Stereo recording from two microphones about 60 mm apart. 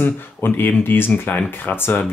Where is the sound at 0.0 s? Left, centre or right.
Left.